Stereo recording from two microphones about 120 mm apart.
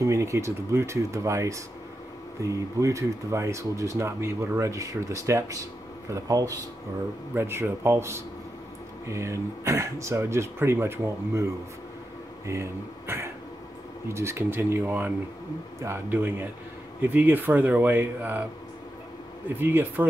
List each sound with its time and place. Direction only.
0.0 s speech: 25° right (ahead or behind)
19.5 s speech: 15° right (ahead or behind)